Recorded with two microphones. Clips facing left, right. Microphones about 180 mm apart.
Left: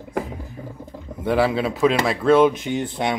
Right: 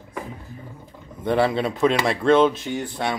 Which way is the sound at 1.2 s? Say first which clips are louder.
Left 1 dB; 5° left (ahead or behind).